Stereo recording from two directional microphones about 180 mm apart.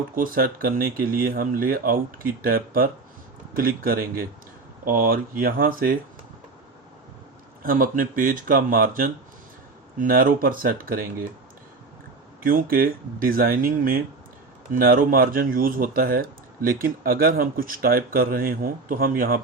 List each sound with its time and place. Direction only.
0.2 s speech: 55° right (ahead or behind)
7.6 s speech: 50° right (ahead or behind)
12.4 s speech: 55° right (ahead or behind)